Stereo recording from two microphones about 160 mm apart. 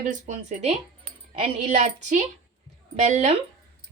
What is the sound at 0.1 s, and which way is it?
A woman's voice, 45° right (ahead or behind).